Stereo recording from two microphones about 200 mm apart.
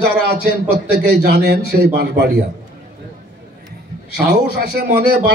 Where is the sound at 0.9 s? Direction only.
55° right (ahead or behind).